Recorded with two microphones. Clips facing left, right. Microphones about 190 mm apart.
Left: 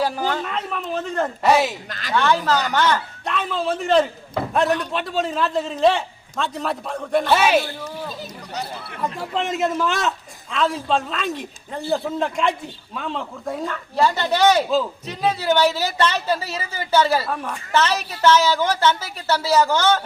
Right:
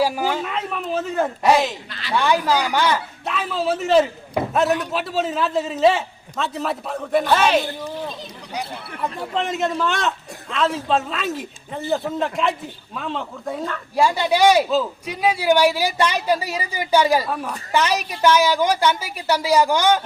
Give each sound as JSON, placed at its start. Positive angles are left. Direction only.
{"t": 0.0, "sound": "speech", "side_deg": -10}
{"t": 1.9, "sound": "speech", "side_deg": 45}
{"t": 2.1, "sound": "a woman's voice", "side_deg": -10}
{"t": 7.6, "sound": "speech", "side_deg": -20}
{"t": 8.5, "sound": "speech", "side_deg": 0}
{"t": 13.9, "sound": "a woman's voice", "side_deg": -10}